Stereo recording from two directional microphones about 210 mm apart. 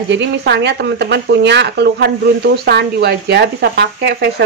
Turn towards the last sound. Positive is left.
turn(degrees=-50)  # may be behind; listen again after turning